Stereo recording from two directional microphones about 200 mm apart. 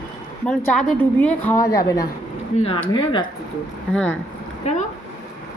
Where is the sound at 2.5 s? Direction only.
30° left (ahead or behind).